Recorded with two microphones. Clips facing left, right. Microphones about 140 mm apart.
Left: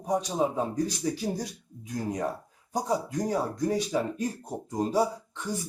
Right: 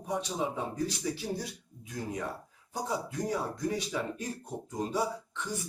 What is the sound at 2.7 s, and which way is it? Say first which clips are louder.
Speech: left 6 dB; 40° left (ahead or behind).